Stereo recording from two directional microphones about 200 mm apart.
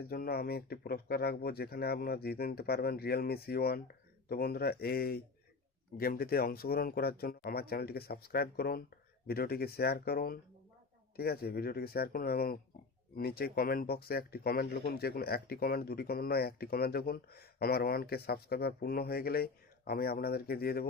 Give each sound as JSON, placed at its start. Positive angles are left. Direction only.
{"t": 0.1, "sound": "speech", "side_deg": 50}